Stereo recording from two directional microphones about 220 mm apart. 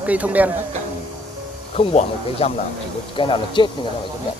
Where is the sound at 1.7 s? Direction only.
30° left (ahead or behind).